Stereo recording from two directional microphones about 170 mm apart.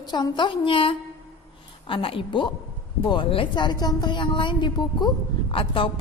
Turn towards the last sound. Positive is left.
turn(degrees=30)  # may be behind; listen again after turning